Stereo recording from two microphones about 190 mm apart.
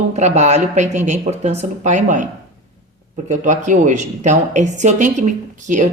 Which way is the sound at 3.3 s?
40° right (ahead or behind).